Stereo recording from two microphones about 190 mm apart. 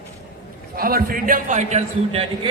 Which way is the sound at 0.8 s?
50° right (ahead or behind).